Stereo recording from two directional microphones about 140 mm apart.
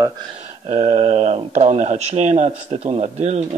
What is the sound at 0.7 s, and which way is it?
Speech, 50° right (ahead or behind).